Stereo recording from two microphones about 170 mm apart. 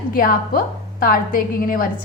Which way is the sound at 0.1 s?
55° left (ahead or behind).